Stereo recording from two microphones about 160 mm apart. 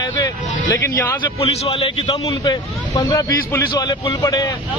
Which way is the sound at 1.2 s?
35° left (ahead or behind).